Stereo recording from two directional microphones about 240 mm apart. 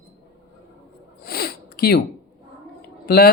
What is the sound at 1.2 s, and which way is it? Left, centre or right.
Zipper, left.